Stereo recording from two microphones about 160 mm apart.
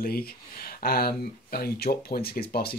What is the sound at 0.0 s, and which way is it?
Speech, 70° left (ahead or behind).